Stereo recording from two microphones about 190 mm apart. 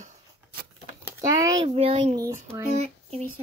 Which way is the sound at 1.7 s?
30° right (ahead or behind).